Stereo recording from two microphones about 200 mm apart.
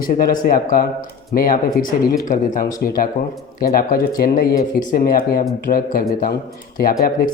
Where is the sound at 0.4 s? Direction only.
45° left (ahead or behind).